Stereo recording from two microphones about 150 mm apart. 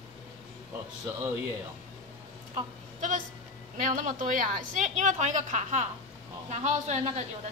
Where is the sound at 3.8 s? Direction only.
60° right (ahead or behind).